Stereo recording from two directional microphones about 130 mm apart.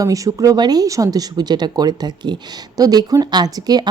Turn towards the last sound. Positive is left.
turn(degrees=-30)  # may be behind; listen again after turning